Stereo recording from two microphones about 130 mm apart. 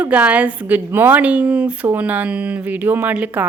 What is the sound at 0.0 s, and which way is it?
A woman's voice, 10° right (ahead or behind).